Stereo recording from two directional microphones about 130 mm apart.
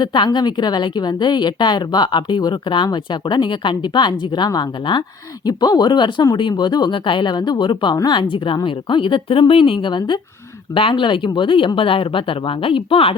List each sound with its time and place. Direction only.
0.0 s a woman's voice: 35° left (ahead or behind)